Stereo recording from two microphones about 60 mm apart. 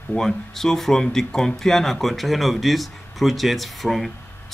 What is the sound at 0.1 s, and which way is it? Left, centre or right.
Speech, centre.